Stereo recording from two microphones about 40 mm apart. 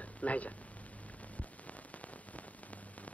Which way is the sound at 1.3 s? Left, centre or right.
Left.